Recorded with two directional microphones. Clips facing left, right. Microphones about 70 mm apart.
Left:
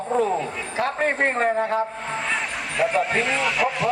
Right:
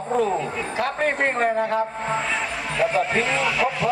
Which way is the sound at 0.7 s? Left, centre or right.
Left.